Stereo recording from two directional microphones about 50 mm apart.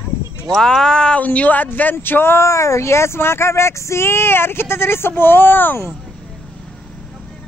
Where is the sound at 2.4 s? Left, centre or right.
Left.